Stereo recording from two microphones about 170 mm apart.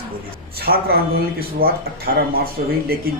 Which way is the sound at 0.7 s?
60° right (ahead or behind).